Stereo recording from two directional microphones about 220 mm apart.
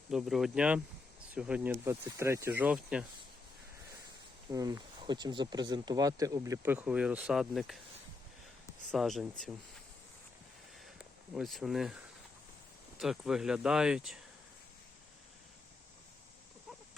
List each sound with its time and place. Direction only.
0.1 s speech: centre (ahead or behind)
4.5 s speech: 15° right (ahead or behind); by 7.8 s centre (ahead or behind)
8.9 s speech: centre (ahead or behind)
10.8 s a sound: centre (ahead or behind)
13.0 s speech: centre (ahead or behind)